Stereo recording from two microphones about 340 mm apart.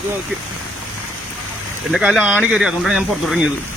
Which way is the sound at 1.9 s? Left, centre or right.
Centre.